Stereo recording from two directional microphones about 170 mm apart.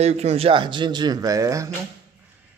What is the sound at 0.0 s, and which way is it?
A man's voice, 40° right (ahead or behind).